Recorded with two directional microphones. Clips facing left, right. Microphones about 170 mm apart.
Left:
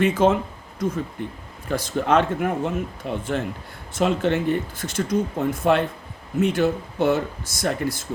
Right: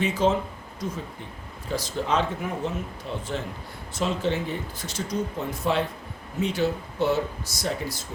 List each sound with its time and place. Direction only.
0.0 s speech: 55° left (ahead or behind)